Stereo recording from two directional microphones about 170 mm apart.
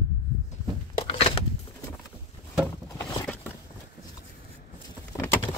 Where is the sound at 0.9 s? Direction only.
35° left (ahead or behind).